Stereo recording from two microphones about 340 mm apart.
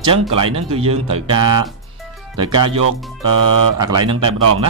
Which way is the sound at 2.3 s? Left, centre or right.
Right.